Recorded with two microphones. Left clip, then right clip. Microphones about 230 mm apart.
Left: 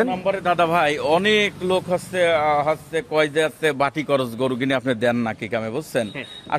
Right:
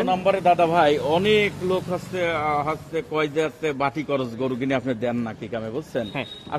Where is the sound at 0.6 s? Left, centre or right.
Left.